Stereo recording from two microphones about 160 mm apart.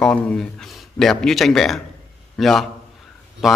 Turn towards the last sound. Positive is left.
turn(degrees=0)  # may be behind; listen again after turning